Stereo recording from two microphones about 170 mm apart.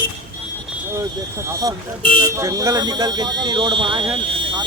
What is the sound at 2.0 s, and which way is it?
Speech, 30° right (ahead or behind).